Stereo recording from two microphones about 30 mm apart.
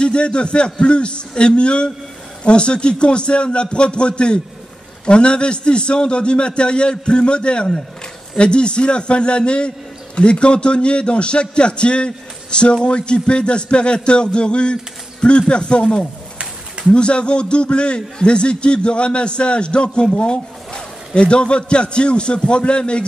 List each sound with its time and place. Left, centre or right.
0.0 s a man's voice: left